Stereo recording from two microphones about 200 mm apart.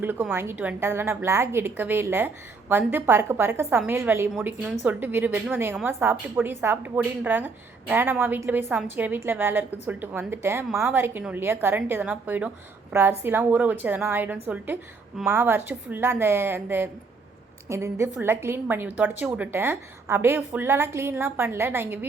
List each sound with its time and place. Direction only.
0.0 s a woman's voice: 10° right (ahead or behind)